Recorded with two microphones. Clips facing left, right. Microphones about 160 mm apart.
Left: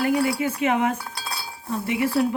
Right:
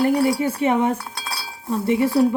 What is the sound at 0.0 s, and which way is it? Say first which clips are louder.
A woman's voice: right 4 dB; 30° right (ahead or behind).